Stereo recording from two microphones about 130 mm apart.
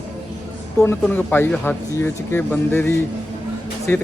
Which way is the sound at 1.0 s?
15° left (ahead or behind).